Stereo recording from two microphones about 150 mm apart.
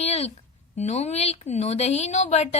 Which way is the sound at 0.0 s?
45° left (ahead or behind).